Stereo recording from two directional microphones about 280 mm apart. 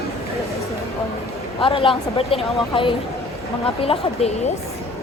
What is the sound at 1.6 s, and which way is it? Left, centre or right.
Speech, centre.